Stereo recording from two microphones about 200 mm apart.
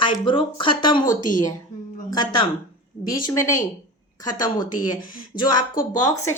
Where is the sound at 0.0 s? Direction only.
25° left (ahead or behind).